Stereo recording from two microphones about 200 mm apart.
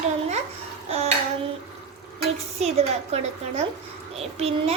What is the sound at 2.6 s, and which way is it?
A child's voice, 30° right (ahead or behind).